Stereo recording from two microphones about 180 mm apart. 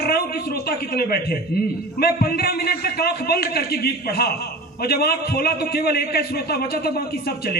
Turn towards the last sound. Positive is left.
turn(degrees=55)  # may be behind; listen again after turning